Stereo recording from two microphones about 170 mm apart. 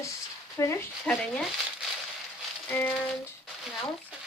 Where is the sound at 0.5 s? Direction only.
15° left (ahead or behind).